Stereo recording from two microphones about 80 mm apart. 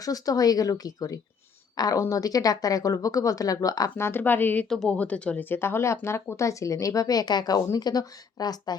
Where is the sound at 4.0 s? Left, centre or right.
Left.